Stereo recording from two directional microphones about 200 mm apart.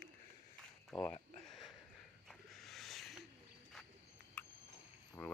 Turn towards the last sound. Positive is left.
turn(degrees=10)  # may be behind; listen again after turning